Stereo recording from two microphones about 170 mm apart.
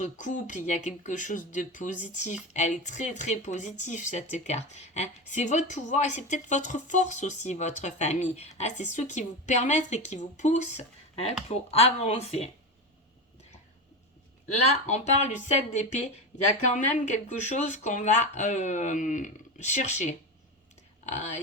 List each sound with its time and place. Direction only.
0.0 s speech: 45° left (ahead or behind)
14.7 s speech: 40° left (ahead or behind)